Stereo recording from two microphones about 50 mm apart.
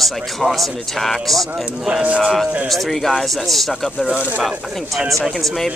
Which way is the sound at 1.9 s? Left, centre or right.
Right.